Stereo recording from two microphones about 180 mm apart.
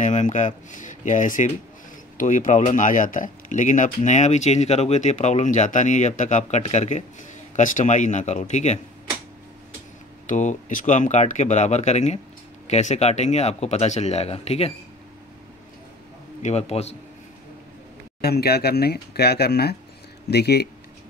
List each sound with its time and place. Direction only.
0.0 s speech: 45° left (ahead or behind)
10.2 s speech: 45° left (ahead or behind)
16.4 s speech: 35° left (ahead or behind)
18.2 s speech: 60° left (ahead or behind)